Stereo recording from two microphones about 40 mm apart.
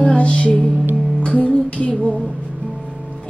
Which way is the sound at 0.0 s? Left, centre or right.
Left.